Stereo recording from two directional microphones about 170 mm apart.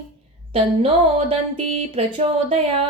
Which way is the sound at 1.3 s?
35° right (ahead or behind).